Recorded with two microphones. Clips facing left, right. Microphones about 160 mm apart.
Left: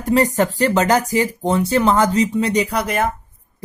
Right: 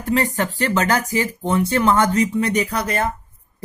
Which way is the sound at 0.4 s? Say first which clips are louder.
Left 4 dB; 35° left (ahead or behind).